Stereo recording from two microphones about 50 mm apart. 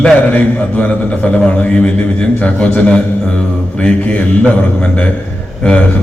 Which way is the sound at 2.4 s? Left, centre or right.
Left.